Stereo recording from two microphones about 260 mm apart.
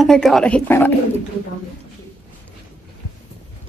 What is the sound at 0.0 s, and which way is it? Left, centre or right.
Speech, centre.